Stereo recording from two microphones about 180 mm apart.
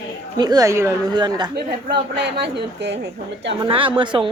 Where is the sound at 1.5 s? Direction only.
65° right (ahead or behind).